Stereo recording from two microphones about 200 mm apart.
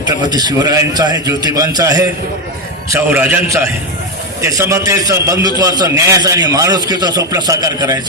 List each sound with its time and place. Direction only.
0.3 s a man's voice: 20° right (ahead or behind)